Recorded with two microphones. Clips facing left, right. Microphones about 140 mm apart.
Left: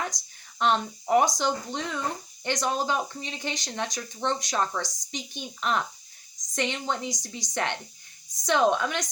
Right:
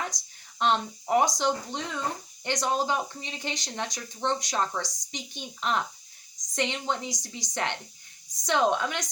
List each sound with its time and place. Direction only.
0.6 s speech: 20° right (ahead or behind)